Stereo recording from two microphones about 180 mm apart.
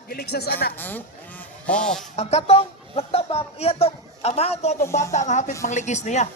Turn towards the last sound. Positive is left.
turn(degrees=40)  # may be behind; listen again after turning